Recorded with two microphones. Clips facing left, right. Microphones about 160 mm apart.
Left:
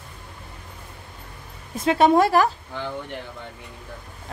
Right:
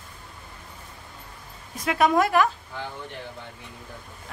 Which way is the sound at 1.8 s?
30° left (ahead or behind).